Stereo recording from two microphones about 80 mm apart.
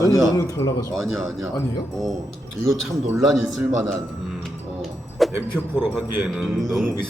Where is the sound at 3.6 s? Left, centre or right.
Right.